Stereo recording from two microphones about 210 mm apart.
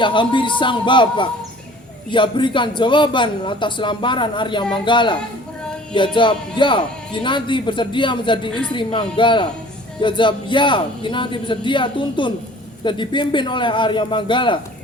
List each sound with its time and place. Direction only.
0.0 s a man's voice: 25° left (ahead or behind)